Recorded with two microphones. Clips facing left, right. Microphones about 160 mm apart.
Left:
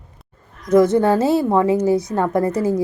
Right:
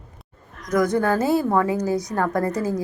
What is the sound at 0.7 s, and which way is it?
A woman's voice, 25° left (ahead or behind).